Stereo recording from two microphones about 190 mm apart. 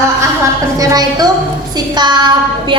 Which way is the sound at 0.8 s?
20° right (ahead or behind).